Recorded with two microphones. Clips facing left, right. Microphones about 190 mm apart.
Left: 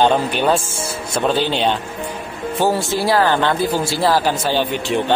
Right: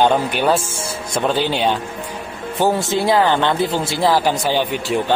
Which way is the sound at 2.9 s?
20° right (ahead or behind).